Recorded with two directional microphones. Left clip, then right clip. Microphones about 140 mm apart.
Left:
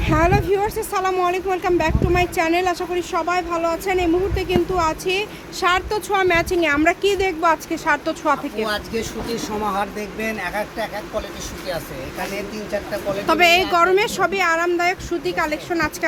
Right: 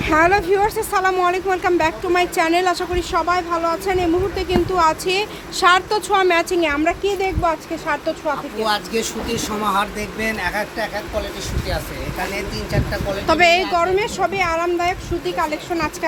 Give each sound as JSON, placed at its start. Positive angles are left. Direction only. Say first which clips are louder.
{"t": 0.0, "sound": "speech", "louder": "right 3 dB", "side_deg": -5}
{"t": 6.7, "sound": "speech", "louder": "left 2 dB", "side_deg": 30}
{"t": 8.6, "sound": "speech", "louder": "right 4 dB", "side_deg": -15}
{"t": 13.2, "sound": "a woman's voice", "louder": "right 1 dB", "side_deg": 15}
{"t": 14.8, "sound": "speech", "louder": "even", "side_deg": 35}